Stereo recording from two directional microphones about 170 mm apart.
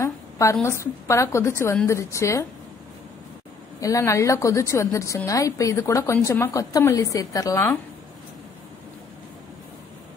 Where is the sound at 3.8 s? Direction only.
20° left (ahead or behind).